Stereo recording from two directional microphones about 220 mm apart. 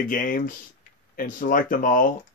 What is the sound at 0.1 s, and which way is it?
Speech, 35° left (ahead or behind).